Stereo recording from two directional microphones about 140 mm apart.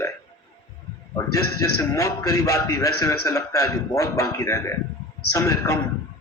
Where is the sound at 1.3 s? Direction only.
25° left (ahead or behind).